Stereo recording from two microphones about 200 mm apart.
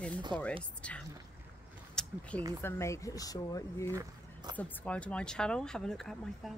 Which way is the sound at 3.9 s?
20° right (ahead or behind).